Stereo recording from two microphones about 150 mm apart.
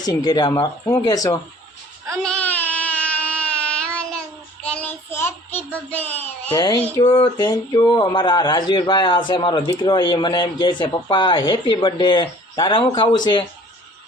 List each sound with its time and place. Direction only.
0.0 s speech: 25° left (ahead or behind)
2.2 s a sound: 10° left (ahead or behind)
4.6 s child singing: 10° left (ahead or behind)
7.0 s speech: 30° left (ahead or behind)